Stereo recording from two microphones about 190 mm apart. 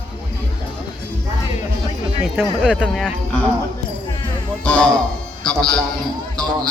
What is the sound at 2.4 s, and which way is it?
A man's voice, centre (ahead or behind).